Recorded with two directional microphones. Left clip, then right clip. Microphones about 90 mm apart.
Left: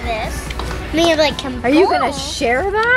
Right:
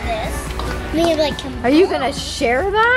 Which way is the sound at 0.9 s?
20° left (ahead or behind).